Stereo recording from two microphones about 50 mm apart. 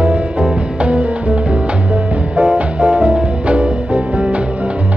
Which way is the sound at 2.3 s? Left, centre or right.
Centre.